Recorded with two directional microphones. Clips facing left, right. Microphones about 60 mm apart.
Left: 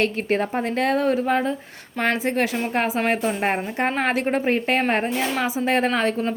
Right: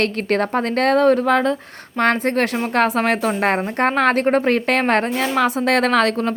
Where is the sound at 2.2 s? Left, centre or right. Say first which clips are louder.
Right 3 dB; right.